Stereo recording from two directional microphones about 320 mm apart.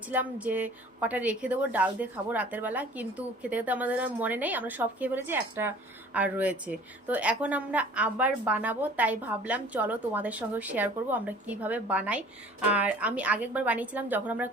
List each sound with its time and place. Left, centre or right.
0.1 s a woman's voice: centre